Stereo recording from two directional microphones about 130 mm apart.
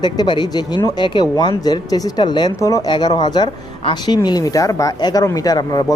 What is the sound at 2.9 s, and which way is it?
Speech, 35° left (ahead or behind).